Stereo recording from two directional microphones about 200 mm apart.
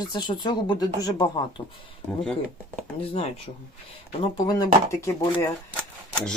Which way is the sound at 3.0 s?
30° left (ahead or behind).